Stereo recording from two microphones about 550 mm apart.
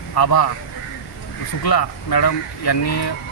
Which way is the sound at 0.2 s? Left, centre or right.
Left.